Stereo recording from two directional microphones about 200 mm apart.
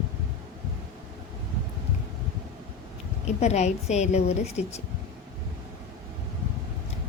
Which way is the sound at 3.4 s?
35° left (ahead or behind).